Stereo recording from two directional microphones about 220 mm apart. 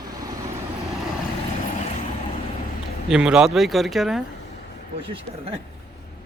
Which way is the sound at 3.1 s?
5° right (ahead or behind).